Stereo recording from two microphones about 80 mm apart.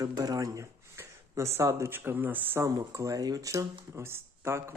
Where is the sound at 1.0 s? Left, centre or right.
Right.